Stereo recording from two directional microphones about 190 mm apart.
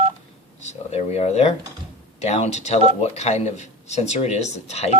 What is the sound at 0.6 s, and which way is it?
Speech, 35° left (ahead or behind).